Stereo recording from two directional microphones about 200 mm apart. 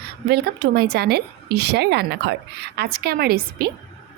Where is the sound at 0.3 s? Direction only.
50° right (ahead or behind).